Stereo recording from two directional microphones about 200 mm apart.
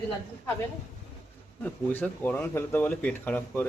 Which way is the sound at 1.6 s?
10° left (ahead or behind).